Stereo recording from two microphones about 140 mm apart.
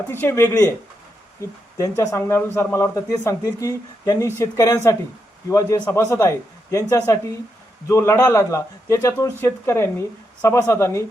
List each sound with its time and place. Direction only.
0.1 s speech: 15° left (ahead or behind)